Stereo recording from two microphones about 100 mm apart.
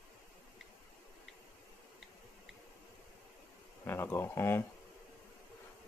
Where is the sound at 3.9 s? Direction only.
25° left (ahead or behind).